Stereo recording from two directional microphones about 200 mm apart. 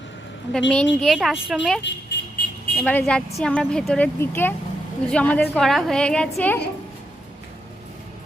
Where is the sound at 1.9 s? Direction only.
60° left (ahead or behind).